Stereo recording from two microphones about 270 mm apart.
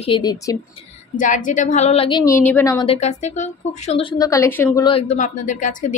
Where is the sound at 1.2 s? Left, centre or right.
Left.